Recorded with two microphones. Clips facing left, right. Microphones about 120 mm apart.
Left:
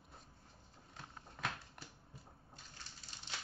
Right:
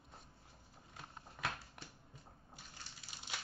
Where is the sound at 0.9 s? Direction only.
5° right (ahead or behind).